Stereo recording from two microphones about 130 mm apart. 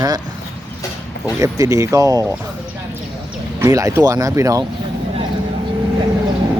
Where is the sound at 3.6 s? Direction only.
25° right (ahead or behind).